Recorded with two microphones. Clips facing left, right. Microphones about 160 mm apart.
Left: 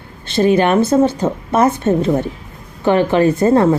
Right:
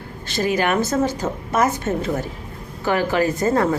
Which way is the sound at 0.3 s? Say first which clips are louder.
Left 7 dB; 25° left (ahead or behind).